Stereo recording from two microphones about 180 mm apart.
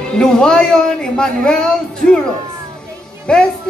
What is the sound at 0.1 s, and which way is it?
Speech, 5° left (ahead or behind).